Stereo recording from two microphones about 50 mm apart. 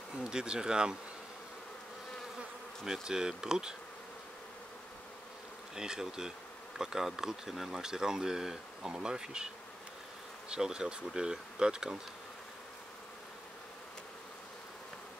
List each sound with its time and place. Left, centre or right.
0.2 s speech: centre
2.8 s speech: centre
5.8 s speech: centre
10.5 s speech: centre